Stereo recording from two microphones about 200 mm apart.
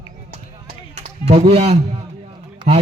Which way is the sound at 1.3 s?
30° right (ahead or behind).